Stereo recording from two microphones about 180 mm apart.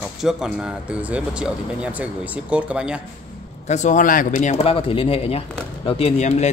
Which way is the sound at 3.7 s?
40° left (ahead or behind).